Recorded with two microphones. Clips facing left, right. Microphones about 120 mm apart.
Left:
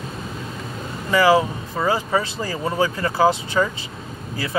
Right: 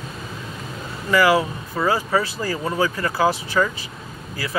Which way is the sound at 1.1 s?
20° left (ahead or behind).